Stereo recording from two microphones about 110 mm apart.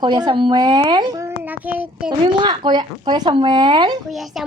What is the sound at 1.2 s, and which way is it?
Speech, 20° right (ahead or behind).